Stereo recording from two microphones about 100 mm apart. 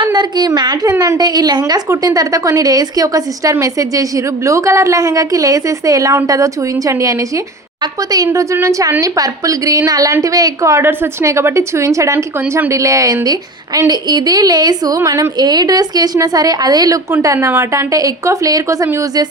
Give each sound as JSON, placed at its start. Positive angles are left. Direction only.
{"t": 0.0, "sound": "a woman's voice", "side_deg": -50}